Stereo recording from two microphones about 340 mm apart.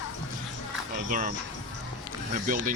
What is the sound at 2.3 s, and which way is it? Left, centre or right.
Speech, right.